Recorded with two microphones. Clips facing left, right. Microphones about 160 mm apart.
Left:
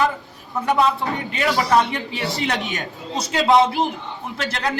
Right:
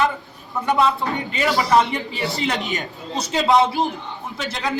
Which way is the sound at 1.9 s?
Centre (ahead or behind).